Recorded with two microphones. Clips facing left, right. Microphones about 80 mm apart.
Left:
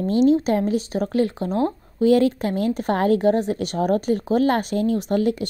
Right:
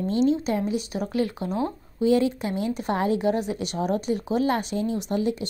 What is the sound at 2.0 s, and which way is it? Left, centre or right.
Speech, left.